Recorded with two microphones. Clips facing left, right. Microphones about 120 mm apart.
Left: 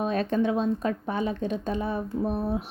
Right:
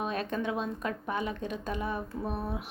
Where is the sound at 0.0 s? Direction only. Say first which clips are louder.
Left 7 dB; 35° left (ahead or behind).